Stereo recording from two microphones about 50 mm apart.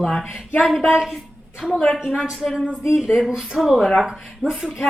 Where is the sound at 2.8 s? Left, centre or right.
Centre.